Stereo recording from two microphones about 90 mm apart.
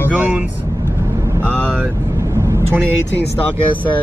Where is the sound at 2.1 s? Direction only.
35° right (ahead or behind).